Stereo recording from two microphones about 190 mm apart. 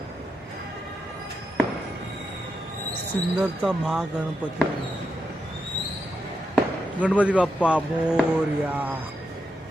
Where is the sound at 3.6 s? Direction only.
Centre (ahead or behind).